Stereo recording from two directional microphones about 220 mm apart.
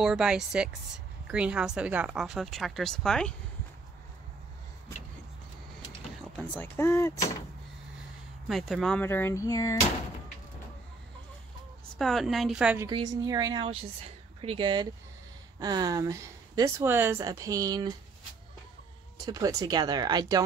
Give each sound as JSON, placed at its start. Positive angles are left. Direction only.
{"t": 0.0, "sound": "a woman's voice", "side_deg": -5}
{"t": 6.3, "sound": "speech", "side_deg": 5}
{"t": 8.5, "sound": "speech", "side_deg": 0}
{"t": 11.8, "sound": "a woman's voice", "side_deg": 0}
{"t": 12.8, "sound": "a woman's voice", "side_deg": -15}
{"t": 19.2, "sound": "speech", "side_deg": -15}